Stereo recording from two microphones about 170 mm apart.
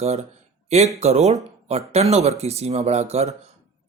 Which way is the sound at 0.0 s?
40° right (ahead or behind).